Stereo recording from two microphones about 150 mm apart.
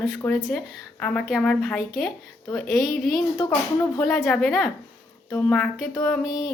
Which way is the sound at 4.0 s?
Centre (ahead or behind).